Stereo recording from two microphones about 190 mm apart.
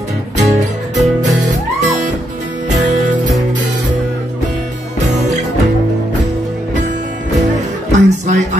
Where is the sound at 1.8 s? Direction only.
40° right (ahead or behind).